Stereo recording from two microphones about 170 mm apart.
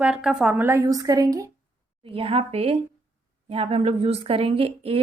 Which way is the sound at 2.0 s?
35° right (ahead or behind).